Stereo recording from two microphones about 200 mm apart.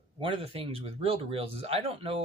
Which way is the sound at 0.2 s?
25° right (ahead or behind).